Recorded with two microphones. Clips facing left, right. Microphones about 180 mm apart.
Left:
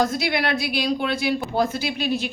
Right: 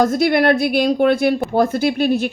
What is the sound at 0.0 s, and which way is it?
Speech, 50° right (ahead or behind).